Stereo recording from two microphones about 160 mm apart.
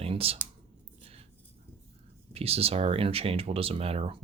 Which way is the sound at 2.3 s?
40° right (ahead or behind).